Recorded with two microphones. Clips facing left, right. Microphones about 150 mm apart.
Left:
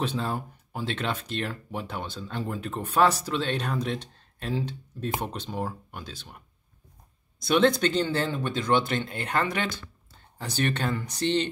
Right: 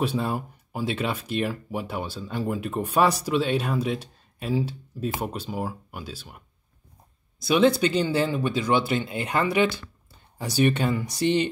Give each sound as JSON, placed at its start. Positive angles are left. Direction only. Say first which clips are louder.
{"t": 0.0, "sound": "speech", "louder": "right 3 dB", "side_deg": -10}